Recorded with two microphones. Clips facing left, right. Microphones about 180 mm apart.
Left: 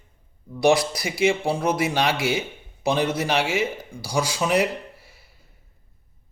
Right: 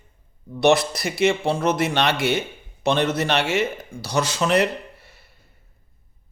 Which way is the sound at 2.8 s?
10° left (ahead or behind).